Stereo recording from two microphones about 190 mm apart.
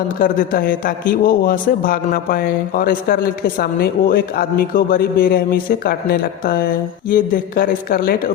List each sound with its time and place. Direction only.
0.2 s a man's voice: 50° left (ahead or behind)